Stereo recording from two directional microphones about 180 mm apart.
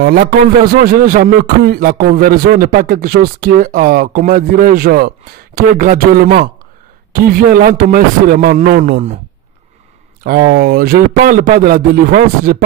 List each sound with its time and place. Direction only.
0.0 s a man's voice: 60° right (ahead or behind)
10.2 s a man's voice: 55° right (ahead or behind)